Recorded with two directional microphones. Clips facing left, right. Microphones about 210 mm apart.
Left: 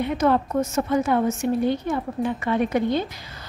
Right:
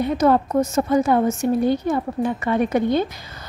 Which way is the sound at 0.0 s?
40° right (ahead or behind).